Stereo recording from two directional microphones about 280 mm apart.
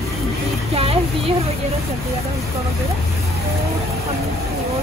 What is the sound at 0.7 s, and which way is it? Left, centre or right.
Speech, right.